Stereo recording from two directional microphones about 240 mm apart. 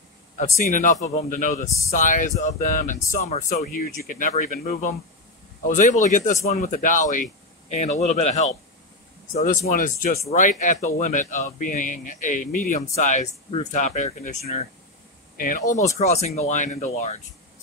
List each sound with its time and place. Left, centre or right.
0.6 s speech: left